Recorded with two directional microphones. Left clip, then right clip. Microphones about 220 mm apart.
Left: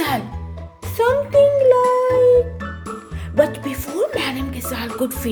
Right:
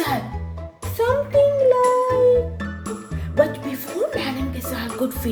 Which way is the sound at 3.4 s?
30° left (ahead or behind).